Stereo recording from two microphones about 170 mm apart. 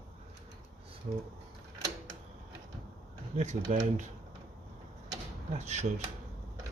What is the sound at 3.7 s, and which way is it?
Speech, 45° right (ahead or behind).